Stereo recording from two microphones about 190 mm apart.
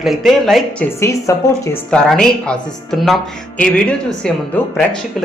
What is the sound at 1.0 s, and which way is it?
Speech, 15° left (ahead or behind).